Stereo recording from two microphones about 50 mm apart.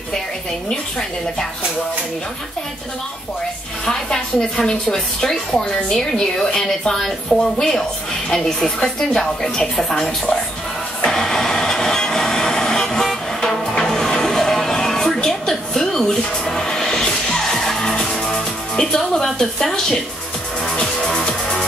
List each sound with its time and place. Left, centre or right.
3.8 s a woman's voice: centre
11.1 s vehicle: centre
12.8 s music: centre
18.9 s a woman's voice: centre
20.7 s music: centre